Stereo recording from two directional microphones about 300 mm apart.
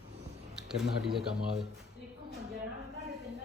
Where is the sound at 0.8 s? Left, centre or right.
Centre.